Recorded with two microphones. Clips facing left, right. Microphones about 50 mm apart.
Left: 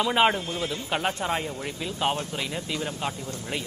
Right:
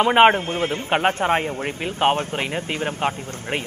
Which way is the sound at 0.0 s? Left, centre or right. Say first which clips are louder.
Right 8 dB; right.